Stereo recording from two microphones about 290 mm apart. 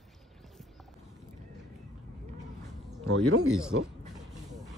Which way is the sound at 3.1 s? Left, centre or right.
Right.